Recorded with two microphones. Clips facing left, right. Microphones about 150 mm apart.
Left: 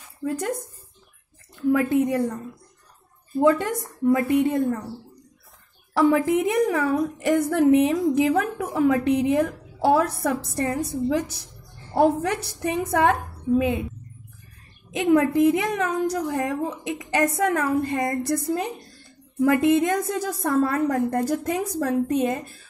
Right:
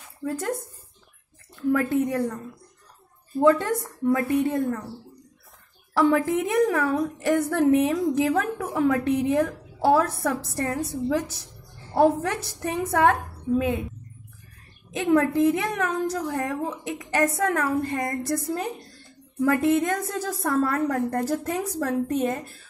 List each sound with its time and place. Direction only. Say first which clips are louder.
0.2 s speech: left 2 dB; 15° left (ahead or behind)
1.7 s a woman's voice: left 2 dB; 15° left (ahead or behind)
3.4 s a woman's voice: right 1 dB; 15° left (ahead or behind)
5.9 s a woman's voice: left 2 dB; 15° left (ahead or behind)
14.9 s a woman's voice: left 2 dB; 15° left (ahead or behind)